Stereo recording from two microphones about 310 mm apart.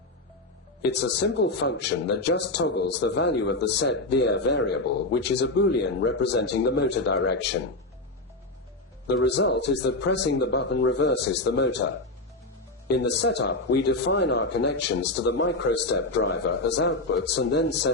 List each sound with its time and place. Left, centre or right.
1.2 s a man's voice: left
9.2 s a man's voice: left
13.0 s a man's voice: left